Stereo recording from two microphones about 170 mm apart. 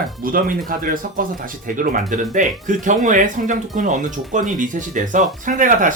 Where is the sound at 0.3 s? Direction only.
55° right (ahead or behind).